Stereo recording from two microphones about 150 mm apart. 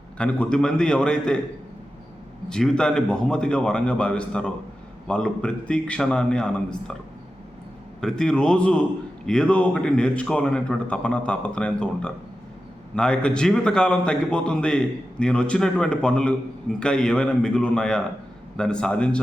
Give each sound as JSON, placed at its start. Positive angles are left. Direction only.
{"t": 0.2, "sound": "a man's voice", "side_deg": 10}
{"t": 2.5, "sound": "a man's voice", "side_deg": 5}
{"t": 8.0, "sound": "a man's voice", "side_deg": 5}